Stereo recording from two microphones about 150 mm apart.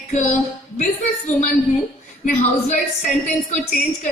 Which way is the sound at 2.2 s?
50° left (ahead or behind).